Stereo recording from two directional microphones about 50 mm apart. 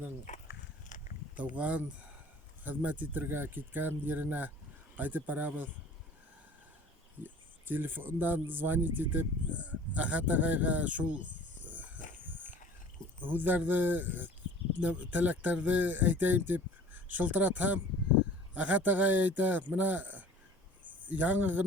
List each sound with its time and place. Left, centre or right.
1.4 s speech: right
7.2 s speech: right
11.9 s a sound: right
13.2 s speech: right